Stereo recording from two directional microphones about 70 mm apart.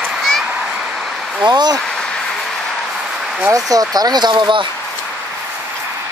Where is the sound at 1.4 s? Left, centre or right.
Right.